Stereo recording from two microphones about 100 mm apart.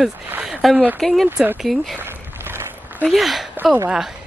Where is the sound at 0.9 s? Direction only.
Centre (ahead or behind).